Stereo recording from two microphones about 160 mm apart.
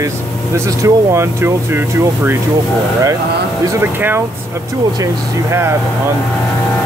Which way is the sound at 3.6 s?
15° right (ahead or behind).